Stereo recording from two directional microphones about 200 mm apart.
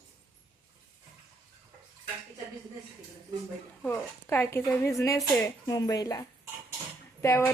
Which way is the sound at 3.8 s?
10° left (ahead or behind).